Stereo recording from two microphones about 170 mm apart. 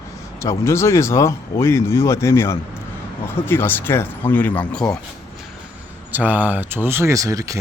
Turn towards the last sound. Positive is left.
turn(degrees=-20)  # may be behind; listen again after turning